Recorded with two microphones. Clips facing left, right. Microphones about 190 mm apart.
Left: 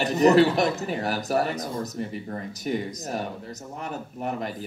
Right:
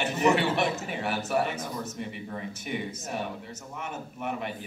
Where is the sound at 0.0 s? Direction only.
40° left (ahead or behind).